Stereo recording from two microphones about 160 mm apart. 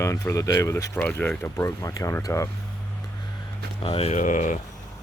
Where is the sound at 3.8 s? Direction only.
35° left (ahead or behind).